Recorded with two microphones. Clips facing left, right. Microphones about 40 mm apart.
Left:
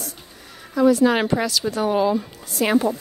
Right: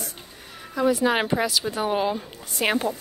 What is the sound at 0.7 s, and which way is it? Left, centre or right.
A woman's voice, centre.